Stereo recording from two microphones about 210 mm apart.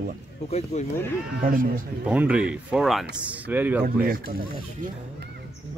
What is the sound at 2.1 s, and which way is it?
Speech, 5° right (ahead or behind).